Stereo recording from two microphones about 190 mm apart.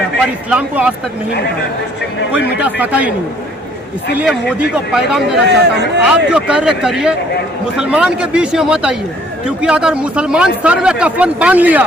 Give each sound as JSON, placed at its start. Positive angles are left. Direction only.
{"t": 0.2, "sound": "speech", "side_deg": -5}
{"t": 2.6, "sound": "a man's voice", "side_deg": -10}
{"t": 4.2, "sound": "speech", "side_deg": -5}
{"t": 5.4, "sound": "speech", "side_deg": -65}
{"t": 6.1, "sound": "speech", "side_deg": -5}